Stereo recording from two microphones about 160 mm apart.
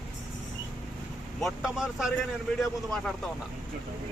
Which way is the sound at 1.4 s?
Centre (ahead or behind).